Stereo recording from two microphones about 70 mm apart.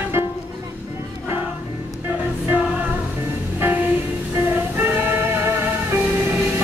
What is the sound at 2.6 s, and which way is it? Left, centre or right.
Music, centre.